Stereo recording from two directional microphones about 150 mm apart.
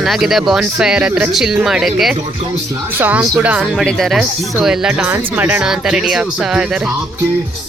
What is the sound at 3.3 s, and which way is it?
Speech, 10° right (ahead or behind).